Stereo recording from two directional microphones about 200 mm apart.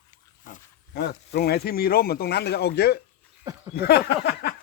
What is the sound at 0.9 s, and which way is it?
Speech, 55° left (ahead or behind).